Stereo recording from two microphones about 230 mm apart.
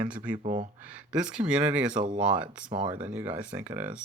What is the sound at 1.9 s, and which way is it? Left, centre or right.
Speech, right.